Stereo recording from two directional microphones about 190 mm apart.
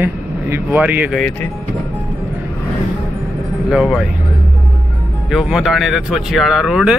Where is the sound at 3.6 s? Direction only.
Centre (ahead or behind).